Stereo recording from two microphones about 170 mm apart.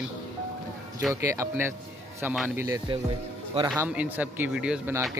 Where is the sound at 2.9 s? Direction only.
30° right (ahead or behind).